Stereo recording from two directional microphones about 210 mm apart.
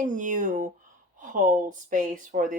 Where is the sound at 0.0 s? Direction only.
35° right (ahead or behind).